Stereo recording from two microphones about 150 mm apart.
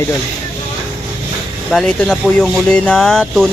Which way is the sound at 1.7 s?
5° left (ahead or behind).